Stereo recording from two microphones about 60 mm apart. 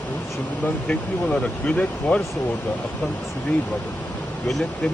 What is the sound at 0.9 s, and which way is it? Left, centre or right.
Speech, centre.